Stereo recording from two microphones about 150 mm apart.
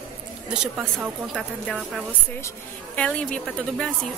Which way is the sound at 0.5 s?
5° right (ahead or behind).